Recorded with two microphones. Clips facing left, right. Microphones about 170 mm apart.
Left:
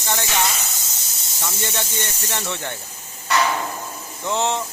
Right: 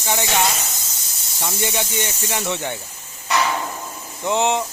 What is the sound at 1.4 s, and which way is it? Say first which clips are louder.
Speech: right 3 dB; 15° right (ahead or behind).